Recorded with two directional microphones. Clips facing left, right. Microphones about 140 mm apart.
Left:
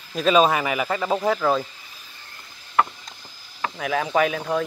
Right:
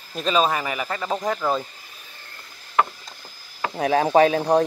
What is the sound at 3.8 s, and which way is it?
Speech, 35° right (ahead or behind).